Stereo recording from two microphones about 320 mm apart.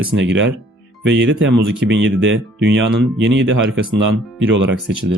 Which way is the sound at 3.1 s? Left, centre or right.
Right.